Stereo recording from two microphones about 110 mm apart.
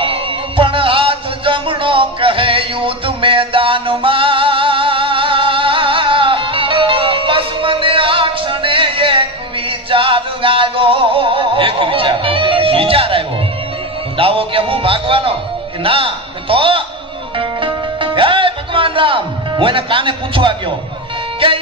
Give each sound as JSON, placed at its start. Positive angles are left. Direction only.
{"t": 0.0, "sound": "music", "side_deg": -50}
{"t": 15.8, "sound": "a sound", "side_deg": -55}
{"t": 17.4, "sound": "music", "side_deg": -50}